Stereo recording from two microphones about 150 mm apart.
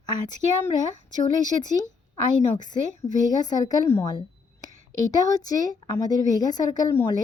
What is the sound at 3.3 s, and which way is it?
A woman's voice, 25° left (ahead or behind).